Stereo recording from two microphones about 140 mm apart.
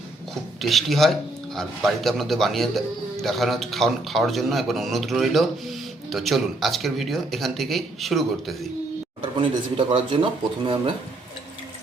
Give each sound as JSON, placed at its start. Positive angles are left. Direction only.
{"t": 0.6, "sound": "speech", "side_deg": 0}
{"t": 9.2, "sound": "speech", "side_deg": -40}